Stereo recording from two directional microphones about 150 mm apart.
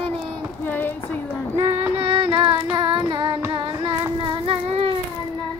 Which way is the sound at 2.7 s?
30° right (ahead or behind).